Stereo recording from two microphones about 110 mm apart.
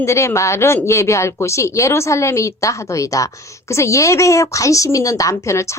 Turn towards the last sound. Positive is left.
turn(degrees=25)  # may be behind; listen again after turning